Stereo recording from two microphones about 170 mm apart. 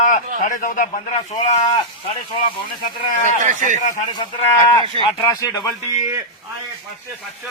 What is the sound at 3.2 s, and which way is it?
Speech, 45° right (ahead or behind).